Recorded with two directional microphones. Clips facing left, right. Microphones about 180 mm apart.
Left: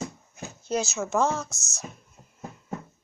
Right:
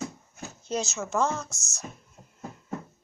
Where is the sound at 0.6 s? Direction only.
5° left (ahead or behind).